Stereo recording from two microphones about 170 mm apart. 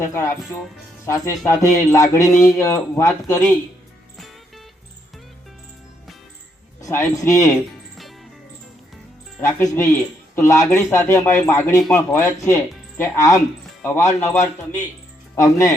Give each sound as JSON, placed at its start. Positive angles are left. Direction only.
{"t": 0.0, "sound": "a man's voice", "side_deg": 15}
{"t": 6.8, "sound": "a man's voice", "side_deg": 20}
{"t": 9.4, "sound": "a man's voice", "side_deg": 15}
{"t": 15.4, "sound": "a man's voice", "side_deg": 20}